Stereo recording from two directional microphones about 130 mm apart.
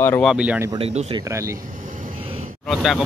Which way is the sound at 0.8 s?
55° right (ahead or behind).